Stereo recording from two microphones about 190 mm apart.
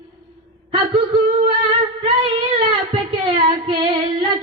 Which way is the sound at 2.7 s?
30° right (ahead or behind).